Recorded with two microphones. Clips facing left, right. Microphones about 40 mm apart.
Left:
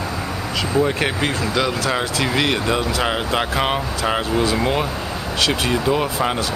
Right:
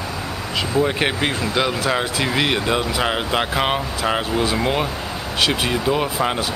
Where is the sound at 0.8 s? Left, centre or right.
Right.